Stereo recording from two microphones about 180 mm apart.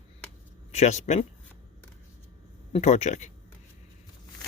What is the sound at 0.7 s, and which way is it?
Speech, 40° left (ahead or behind).